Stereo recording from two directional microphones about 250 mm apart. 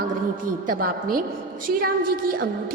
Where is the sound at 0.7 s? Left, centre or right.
Right.